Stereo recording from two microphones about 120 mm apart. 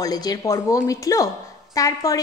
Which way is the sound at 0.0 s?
30° left (ahead or behind).